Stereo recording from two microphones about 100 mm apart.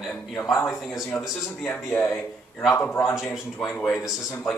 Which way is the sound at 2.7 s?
25° left (ahead or behind).